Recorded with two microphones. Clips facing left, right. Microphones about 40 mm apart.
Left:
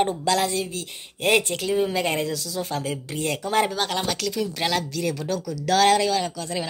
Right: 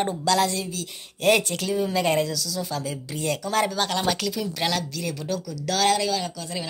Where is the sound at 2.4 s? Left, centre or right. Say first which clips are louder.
Left 1 dB; left.